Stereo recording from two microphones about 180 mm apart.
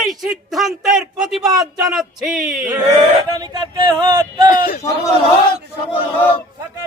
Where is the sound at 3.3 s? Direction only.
20° right (ahead or behind).